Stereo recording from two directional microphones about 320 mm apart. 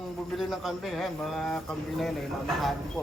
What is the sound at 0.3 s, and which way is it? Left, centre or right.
Speech, centre.